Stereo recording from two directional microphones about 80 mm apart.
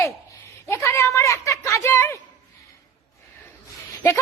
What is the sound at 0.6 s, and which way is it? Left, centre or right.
A woman's voice, left.